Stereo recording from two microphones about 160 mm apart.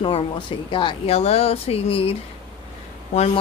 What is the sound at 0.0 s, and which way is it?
Speech, 30° left (ahead or behind).